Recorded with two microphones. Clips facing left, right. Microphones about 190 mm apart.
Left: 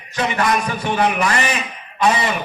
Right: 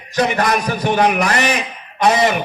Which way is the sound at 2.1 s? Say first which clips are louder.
Right 5 dB; 40° right (ahead or behind).